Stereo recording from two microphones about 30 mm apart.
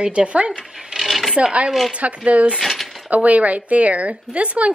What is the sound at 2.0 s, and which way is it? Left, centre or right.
A woman's voice, right.